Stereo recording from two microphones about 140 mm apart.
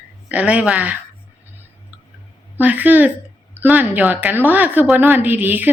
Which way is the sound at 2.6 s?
10° right (ahead or behind).